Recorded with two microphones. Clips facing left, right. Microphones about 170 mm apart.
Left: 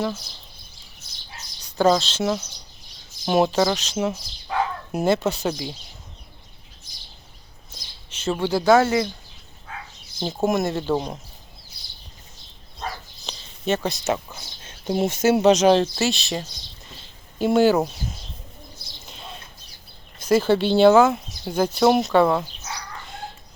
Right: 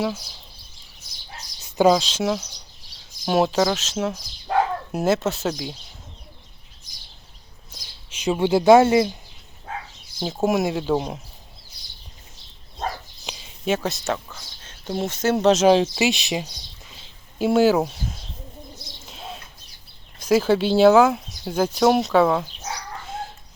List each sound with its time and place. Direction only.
0.0 s speech: 10° right (ahead or behind)
1.8 s speech: 10° right (ahead or behind)
7.7 s a sound: 10° right (ahead or behind)
8.4 s speech: 25° right (ahead or behind)
10.2 s speech: 5° right (ahead or behind)
13.2 s a sound: 10° right (ahead or behind)
14.1 s speech: 10° left (ahead or behind)
19.0 s bird: centre (ahead or behind)
20.1 s speech: 10° right (ahead or behind)
23.0 s dog: centre (ahead or behind)